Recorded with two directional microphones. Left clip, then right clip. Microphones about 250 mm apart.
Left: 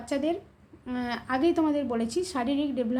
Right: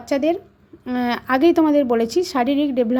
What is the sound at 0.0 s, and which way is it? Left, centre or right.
A woman's voice, right.